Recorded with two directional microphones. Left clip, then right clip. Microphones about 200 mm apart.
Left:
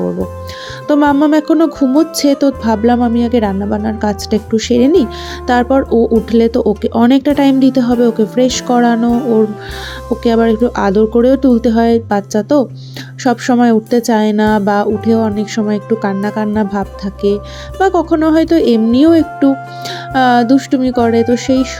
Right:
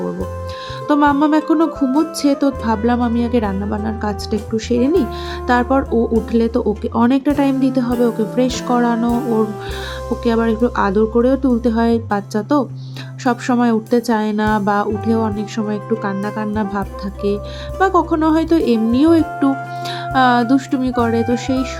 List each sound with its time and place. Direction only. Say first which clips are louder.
0.0 s music: left 6 dB; centre (ahead or behind)
0.9 s speech: left 3 dB; 15° left (ahead or behind)
1.8 s music: left 5 dB; centre (ahead or behind)
2.1 s speech: left 5 dB; 20° left (ahead or behind)
4.9 s music: left 5 dB; centre (ahead or behind)
5.5 s speech: left 4 dB; 20° left (ahead or behind)
5.9 s music: left 6 dB; 5° right (ahead or behind)
6.3 s speech: left 6 dB; 20° left (ahead or behind)
9.0 s music: left 5 dB; centre (ahead or behind)
10.2 s speech: left 5 dB; 20° left (ahead or behind)